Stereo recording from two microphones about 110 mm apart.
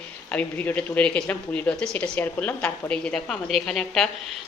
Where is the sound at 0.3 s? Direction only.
15° left (ahead or behind).